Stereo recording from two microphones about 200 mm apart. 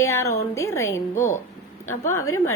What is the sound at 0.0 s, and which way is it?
A woman's voice, 15° left (ahead or behind).